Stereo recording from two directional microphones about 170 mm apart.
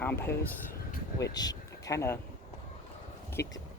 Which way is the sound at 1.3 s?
20° left (ahead or behind).